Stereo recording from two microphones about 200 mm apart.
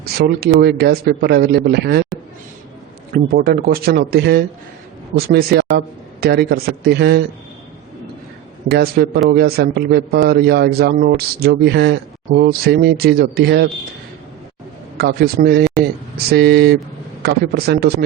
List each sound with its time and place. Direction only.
0.0 s a man's voice: 50° right (ahead or behind)
3.1 s a man's voice: 50° right (ahead or behind)
8.7 s a man's voice: 50° right (ahead or behind)
14.9 s a man's voice: 55° right (ahead or behind)